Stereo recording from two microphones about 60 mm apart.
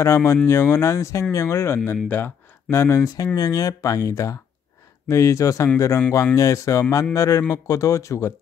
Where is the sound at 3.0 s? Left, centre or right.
Left.